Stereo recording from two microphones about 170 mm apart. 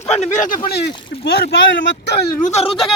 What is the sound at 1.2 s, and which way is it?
Speech, 70° left (ahead or behind).